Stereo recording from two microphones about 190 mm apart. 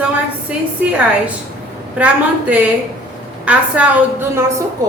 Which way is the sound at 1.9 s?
5° right (ahead or behind).